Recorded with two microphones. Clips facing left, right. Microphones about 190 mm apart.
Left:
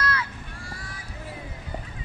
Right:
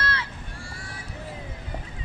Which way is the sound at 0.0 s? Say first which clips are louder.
Left 2 dB; 30° right (ahead or behind).